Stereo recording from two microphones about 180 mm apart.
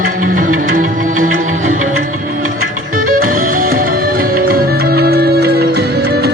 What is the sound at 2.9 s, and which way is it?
Music, 50° right (ahead or behind).